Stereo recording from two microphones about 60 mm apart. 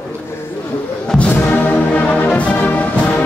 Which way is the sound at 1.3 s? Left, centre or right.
Left.